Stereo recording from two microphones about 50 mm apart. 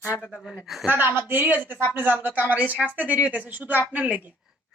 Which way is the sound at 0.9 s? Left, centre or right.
Right.